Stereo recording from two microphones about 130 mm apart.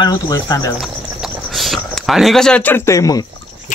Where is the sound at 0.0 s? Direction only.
30° left (ahead or behind).